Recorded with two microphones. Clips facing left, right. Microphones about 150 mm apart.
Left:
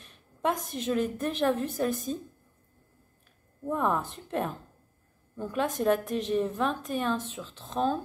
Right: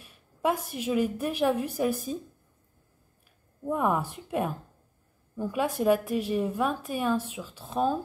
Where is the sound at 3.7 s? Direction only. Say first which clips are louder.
Right 1 dB; 10° right (ahead or behind).